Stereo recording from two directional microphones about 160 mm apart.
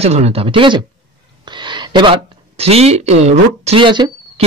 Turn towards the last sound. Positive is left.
turn(degrees=-30)  # may be behind; listen again after turning